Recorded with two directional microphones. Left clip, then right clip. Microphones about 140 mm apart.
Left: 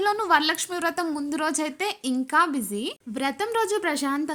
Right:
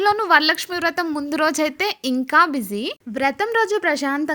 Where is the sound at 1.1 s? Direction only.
50° right (ahead or behind).